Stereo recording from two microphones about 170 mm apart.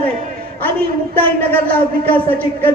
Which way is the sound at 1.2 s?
10° left (ahead or behind).